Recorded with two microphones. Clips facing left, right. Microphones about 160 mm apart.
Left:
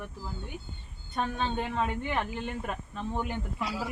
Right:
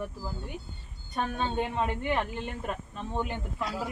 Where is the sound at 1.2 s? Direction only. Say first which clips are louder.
Right 1 dB; 10° right (ahead or behind).